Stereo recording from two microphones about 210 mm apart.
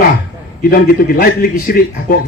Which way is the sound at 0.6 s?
45° left (ahead or behind).